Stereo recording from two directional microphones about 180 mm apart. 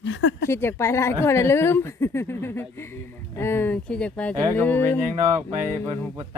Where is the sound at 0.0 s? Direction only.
90° left.